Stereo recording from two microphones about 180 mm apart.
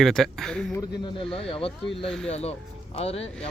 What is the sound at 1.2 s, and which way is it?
Speech, 30° left (ahead or behind).